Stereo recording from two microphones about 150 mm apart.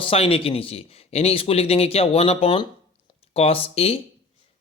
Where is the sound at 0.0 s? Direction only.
40° left (ahead or behind).